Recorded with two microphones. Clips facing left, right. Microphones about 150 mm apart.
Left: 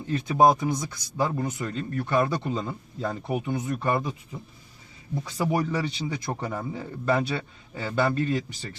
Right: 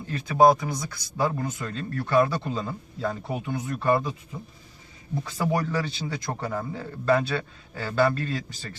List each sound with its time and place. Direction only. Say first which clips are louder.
0.1 s speech: right 1 dB; 20° left (ahead or behind)
5.2 s a man's voice: even; 15° left (ahead or behind)